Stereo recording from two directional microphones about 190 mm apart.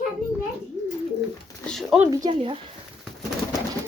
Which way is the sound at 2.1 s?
20° right (ahead or behind).